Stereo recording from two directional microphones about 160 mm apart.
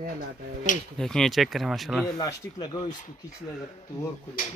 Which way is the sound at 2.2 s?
25° left (ahead or behind).